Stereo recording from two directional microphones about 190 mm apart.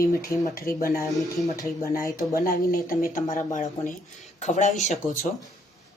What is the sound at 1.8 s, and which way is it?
Speech, 50° left (ahead or behind).